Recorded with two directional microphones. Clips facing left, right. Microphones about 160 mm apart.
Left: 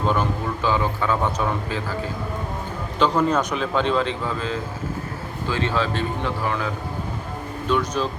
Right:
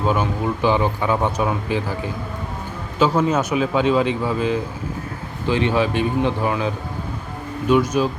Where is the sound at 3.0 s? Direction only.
5° right (ahead or behind).